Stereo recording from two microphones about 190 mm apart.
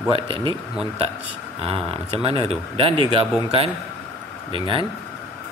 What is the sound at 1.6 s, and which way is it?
A man's voice, 30° right (ahead or behind).